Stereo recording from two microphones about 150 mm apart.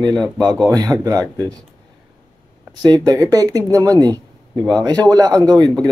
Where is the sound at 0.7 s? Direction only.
25° right (ahead or behind).